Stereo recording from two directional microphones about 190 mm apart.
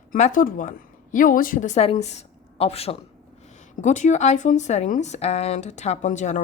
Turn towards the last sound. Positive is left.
turn(degrees=40)  # may be behind; listen again after turning